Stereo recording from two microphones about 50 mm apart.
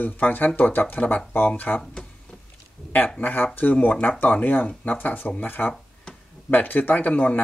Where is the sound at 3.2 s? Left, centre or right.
Left.